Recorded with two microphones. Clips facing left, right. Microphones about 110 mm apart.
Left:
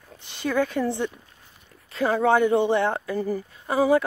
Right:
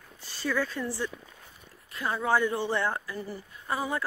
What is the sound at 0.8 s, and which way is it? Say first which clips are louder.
Speech: left 7 dB; 20° left (ahead or behind).